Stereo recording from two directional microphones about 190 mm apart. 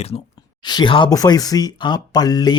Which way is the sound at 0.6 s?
25° left (ahead or behind).